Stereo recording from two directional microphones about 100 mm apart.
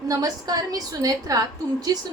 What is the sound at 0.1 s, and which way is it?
A woman's voice, 40° right (ahead or behind).